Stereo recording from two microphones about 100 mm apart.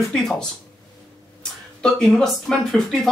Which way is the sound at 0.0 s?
5° left (ahead or behind).